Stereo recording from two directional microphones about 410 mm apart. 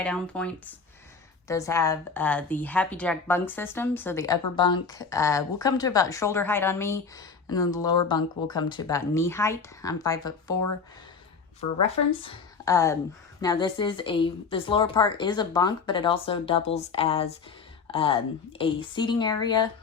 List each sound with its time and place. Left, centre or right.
0.0 s a woman's voice: centre
10.5 s speech: left
11.8 s a woman's voice: centre